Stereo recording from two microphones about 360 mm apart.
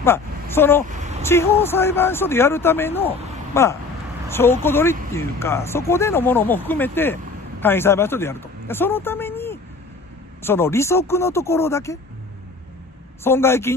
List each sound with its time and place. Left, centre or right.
0.0 s speech: centre
13.2 s speech: centre